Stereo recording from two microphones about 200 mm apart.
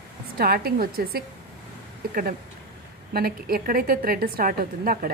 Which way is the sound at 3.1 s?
50° right (ahead or behind).